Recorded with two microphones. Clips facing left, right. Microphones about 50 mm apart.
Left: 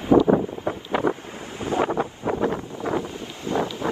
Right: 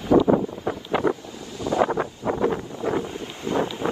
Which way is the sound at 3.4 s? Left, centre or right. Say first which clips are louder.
Right 1 dB; right.